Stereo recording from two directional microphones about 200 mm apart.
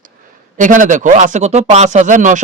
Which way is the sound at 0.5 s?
40° right (ahead or behind).